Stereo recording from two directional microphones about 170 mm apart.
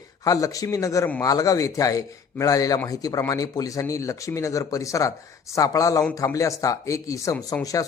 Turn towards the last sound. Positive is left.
turn(degrees=20)  # may be behind; listen again after turning